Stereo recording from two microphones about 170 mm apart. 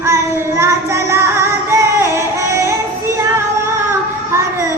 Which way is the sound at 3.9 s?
15° right (ahead or behind).